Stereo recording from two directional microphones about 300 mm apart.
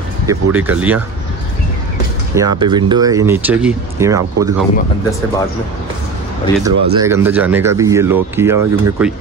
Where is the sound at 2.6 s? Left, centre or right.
Centre.